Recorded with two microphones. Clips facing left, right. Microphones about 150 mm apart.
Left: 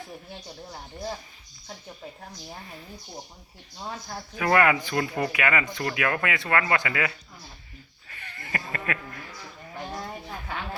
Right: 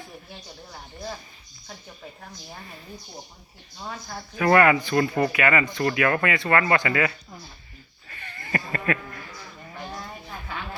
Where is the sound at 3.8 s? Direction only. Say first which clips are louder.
Even; 20° left (ahead or behind).